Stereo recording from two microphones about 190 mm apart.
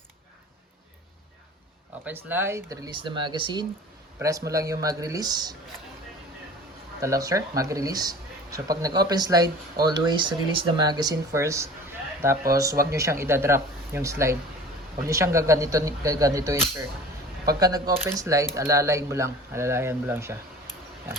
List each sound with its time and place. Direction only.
2.0 s speech: 10° right (ahead or behind)
7.0 s speech: 15° right (ahead or behind)
12.9 s speech: 15° right (ahead or behind)